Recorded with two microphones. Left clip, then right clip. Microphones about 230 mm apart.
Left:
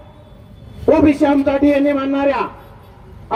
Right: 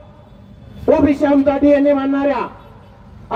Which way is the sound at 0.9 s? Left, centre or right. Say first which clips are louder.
Even; left.